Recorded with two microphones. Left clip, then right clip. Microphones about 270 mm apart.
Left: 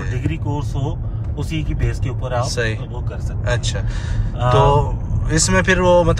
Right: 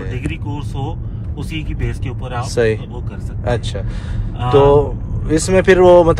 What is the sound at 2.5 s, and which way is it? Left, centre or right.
Speech, right.